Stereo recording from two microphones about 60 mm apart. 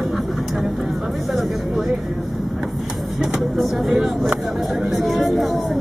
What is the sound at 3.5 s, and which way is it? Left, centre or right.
Speech, centre.